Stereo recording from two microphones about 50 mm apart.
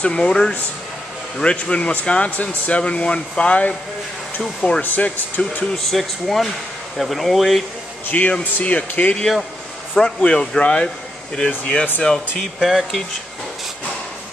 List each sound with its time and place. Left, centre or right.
0.0 s speech: centre
4.8 s speech: left
5.9 s speech: centre
8.1 s speech: left; by 12.4 s centre
12.5 s speech: centre